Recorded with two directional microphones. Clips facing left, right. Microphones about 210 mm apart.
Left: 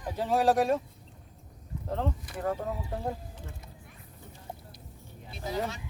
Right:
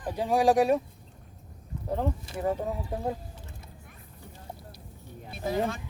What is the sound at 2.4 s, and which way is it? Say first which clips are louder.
Speech: right 3 dB; 15° right (ahead or behind).